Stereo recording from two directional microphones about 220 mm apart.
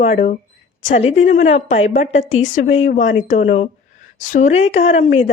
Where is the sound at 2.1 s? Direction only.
60° left (ahead or behind).